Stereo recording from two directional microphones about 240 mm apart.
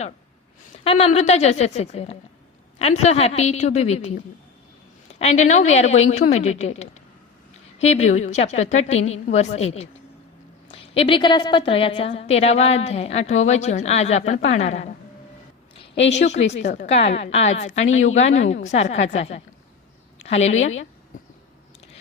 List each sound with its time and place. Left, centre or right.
0.9 s a woman's voice: left
5.2 s a woman's voice: left
16.1 s a woman's voice: left
21.1 s a sound: left